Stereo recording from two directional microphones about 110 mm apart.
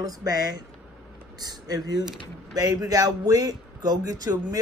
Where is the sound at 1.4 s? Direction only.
35° right (ahead or behind).